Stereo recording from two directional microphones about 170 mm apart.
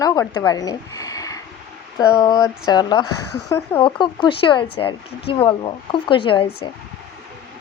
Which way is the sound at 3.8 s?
30° left (ahead or behind).